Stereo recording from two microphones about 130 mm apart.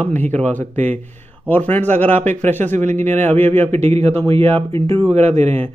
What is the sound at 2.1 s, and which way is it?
Speech, 65° right (ahead or behind).